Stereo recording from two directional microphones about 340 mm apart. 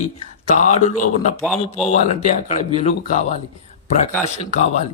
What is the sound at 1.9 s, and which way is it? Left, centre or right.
A man's voice, centre.